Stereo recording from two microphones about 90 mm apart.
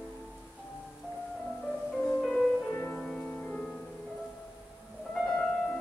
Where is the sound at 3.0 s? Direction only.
Centre (ahead or behind).